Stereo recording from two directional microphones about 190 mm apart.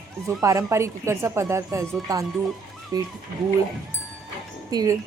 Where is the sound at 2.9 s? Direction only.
20° right (ahead or behind).